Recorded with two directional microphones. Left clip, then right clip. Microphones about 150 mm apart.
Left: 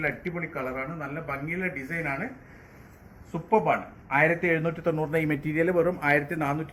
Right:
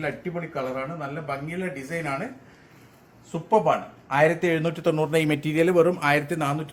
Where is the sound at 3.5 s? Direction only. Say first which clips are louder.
Right 3 dB; 75° right (ahead or behind); by 4.4 s 90° right.